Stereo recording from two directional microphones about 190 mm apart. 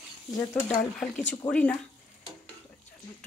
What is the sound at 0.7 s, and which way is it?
Speech, 5° left (ahead or behind).